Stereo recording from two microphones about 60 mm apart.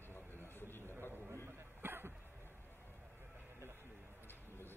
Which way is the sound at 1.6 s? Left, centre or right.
Right.